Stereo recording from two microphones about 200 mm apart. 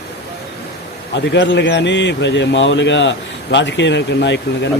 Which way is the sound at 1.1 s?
60° left (ahead or behind).